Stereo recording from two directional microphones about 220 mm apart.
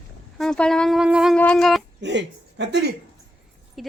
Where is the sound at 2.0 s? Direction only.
55° right (ahead or behind).